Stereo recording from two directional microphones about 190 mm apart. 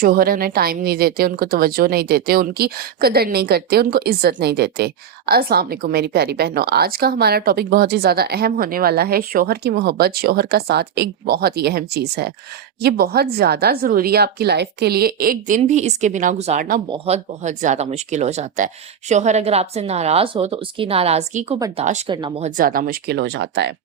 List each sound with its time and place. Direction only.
0.0 s speech: 50° right (ahead or behind); by 22.1 s 35° right (ahead or behind)
22.1 s speech: 25° right (ahead or behind)
22.4 s speech: 45° right (ahead or behind)